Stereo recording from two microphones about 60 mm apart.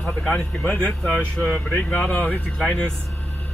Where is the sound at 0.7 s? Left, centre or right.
Centre.